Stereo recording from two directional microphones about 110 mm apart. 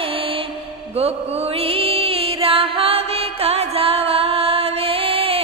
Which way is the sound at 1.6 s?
60° right (ahead or behind).